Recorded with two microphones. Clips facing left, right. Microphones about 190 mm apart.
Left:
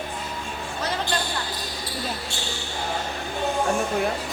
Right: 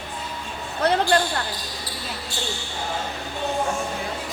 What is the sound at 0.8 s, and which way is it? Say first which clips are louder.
Basketball bounce: right 9 dB; 60° right (ahead or behind).